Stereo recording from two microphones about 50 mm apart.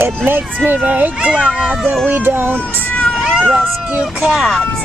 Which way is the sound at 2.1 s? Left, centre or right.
Right.